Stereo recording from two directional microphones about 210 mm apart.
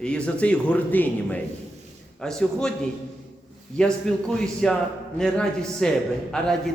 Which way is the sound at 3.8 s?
5° left (ahead or behind).